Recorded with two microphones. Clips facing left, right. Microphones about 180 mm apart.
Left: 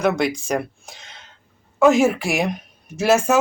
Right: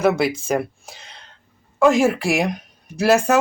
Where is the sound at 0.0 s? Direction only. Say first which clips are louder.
Right 2 dB; 5° right (ahead or behind).